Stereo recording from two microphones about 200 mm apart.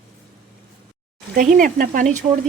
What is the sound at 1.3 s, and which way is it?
Speech, 40° right (ahead or behind).